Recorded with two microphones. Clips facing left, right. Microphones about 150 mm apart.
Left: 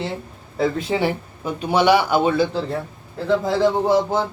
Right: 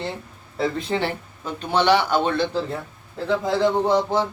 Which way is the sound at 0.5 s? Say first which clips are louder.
Left 3 dB; 5° left (ahead or behind).